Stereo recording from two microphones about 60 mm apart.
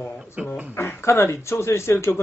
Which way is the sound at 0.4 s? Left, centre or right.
Right.